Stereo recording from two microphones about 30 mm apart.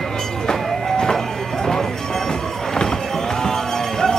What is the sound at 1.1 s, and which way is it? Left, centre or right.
Music, centre.